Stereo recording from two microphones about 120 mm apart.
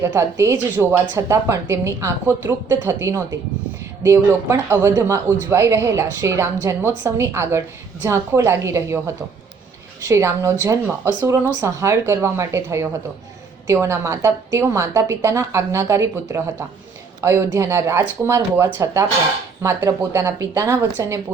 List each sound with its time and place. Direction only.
0.0 s a woman's voice: 25° right (ahead or behind)
10.0 s a woman's voice: 25° right (ahead or behind)